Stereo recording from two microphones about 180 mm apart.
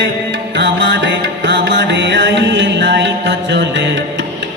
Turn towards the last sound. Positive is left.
turn(degrees=-75)  # may be behind; listen again after turning